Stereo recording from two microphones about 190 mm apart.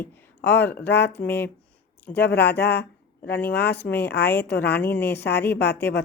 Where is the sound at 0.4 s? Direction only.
65° left (ahead or behind).